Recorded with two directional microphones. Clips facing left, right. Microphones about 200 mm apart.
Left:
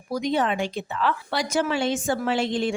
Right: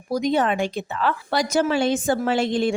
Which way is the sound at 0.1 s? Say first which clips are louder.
Right 3 dB; 45° right (ahead or behind).